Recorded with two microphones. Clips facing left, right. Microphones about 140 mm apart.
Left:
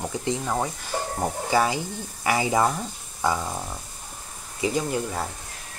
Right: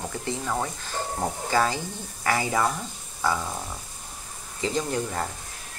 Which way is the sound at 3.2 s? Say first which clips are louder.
Left 1 dB; 20° left (ahead or behind).